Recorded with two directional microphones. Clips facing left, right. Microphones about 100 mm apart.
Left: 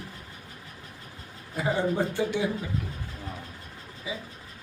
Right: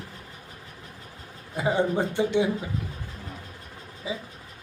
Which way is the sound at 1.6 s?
20° right (ahead or behind).